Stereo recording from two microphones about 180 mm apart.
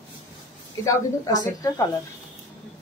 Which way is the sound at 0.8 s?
20° left (ahead or behind).